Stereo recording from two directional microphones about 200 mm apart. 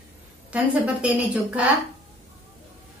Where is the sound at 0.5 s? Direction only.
5° right (ahead or behind).